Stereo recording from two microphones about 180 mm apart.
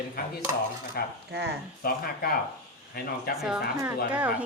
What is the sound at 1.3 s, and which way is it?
Speech, 65° right (ahead or behind).